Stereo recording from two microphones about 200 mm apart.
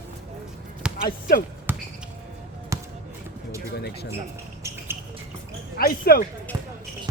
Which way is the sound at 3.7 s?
55° left (ahead or behind).